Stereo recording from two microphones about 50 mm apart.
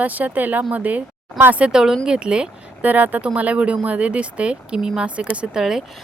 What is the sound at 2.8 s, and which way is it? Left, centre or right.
Speech, right.